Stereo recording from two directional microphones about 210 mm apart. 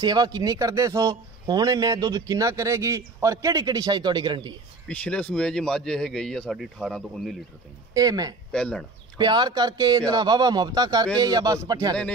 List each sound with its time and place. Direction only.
0.0 s speech: 20° right (ahead or behind)
4.8 s a man's voice: 5° left (ahead or behind)
7.9 s speech: 15° right (ahead or behind)
8.5 s a man's voice: 5° left (ahead or behind)
9.2 s speech: 20° right (ahead or behind)